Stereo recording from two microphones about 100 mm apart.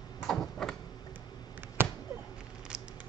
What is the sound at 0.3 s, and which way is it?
Door, 5° left (ahead or behind).